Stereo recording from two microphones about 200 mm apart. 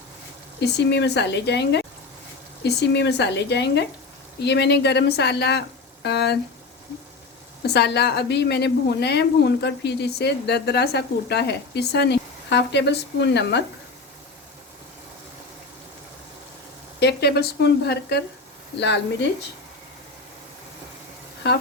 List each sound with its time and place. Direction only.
0.6 s a woman's voice: 60° left (ahead or behind)
7.7 s a woman's voice: 55° left (ahead or behind)
17.0 s a woman's voice: 55° left (ahead or behind)